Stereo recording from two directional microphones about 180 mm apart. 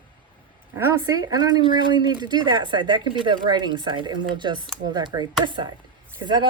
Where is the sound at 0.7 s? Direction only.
15° right (ahead or behind).